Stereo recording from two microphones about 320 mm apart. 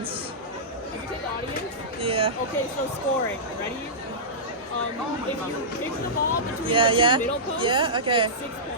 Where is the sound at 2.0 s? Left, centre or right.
Centre.